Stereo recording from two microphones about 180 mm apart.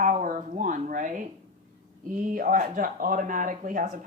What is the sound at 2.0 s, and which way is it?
Speech, 50° right (ahead or behind).